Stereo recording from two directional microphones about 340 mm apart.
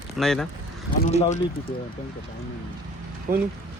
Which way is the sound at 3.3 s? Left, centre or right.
Right.